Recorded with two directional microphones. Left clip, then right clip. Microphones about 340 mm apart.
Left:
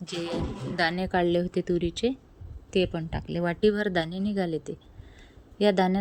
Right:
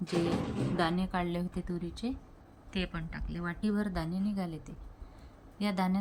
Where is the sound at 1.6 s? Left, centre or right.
Centre.